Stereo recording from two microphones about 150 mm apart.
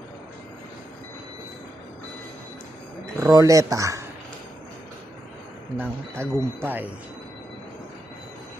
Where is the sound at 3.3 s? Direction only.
20° right (ahead or behind).